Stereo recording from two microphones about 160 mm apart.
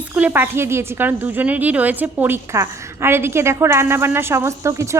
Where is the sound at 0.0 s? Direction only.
10° right (ahead or behind).